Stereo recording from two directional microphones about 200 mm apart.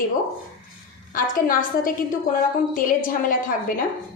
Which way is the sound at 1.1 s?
45° left (ahead or behind).